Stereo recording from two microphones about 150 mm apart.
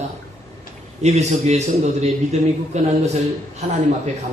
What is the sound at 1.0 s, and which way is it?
A man's voice, 50° right (ahead or behind).